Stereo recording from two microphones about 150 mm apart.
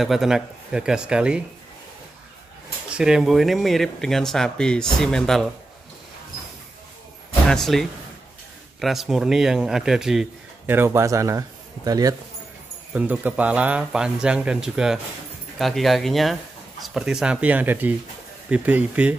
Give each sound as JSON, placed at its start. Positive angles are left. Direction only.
{"t": 0.0, "sound": "speech", "side_deg": 0}
{"t": 2.9, "sound": "speech", "side_deg": -5}
{"t": 7.4, "sound": "speech", "side_deg": 5}
{"t": 10.7, "sound": "speech", "side_deg": -15}
{"t": 12.9, "sound": "speech", "side_deg": -10}